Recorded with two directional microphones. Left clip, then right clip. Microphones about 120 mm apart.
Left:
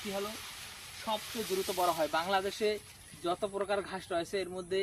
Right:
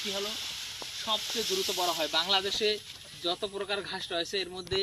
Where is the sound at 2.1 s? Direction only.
30° left (ahead or behind).